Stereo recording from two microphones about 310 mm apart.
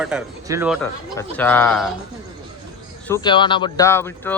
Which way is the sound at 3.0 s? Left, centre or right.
Centre.